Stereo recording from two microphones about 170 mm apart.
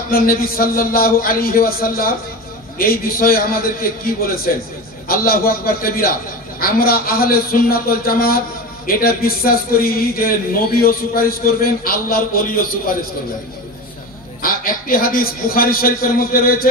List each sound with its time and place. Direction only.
0.1 s a man's voice: 60° left (ahead or behind)
14.4 s a man's voice: 55° left (ahead or behind)